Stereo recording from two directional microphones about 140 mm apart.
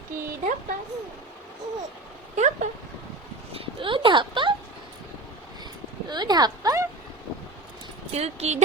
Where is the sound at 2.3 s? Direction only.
55° right (ahead or behind).